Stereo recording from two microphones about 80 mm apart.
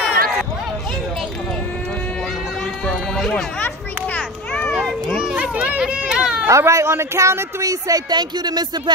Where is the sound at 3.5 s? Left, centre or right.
Centre.